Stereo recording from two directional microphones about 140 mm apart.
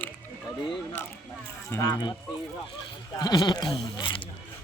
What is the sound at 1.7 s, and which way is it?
Speech, 25° left (ahead or behind).